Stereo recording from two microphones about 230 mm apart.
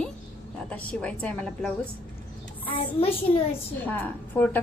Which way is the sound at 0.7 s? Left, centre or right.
Centre.